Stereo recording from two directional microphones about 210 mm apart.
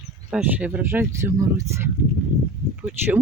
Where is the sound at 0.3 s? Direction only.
5° right (ahead or behind).